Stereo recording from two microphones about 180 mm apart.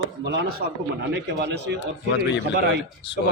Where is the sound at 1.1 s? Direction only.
70° right (ahead or behind).